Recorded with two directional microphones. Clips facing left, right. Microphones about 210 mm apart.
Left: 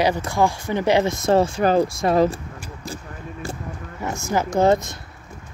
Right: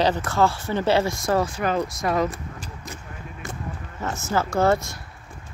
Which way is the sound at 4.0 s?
10° left (ahead or behind).